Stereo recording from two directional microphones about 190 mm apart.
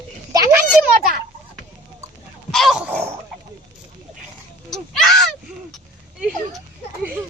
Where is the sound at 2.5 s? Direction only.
Centre (ahead or behind).